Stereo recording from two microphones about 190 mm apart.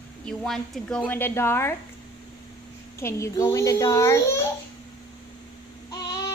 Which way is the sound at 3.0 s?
15° left (ahead or behind).